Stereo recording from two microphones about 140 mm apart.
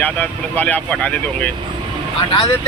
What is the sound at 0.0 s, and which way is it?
Speech, 10° left (ahead or behind).